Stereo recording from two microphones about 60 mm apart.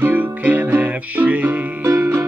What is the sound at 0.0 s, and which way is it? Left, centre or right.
Music, right.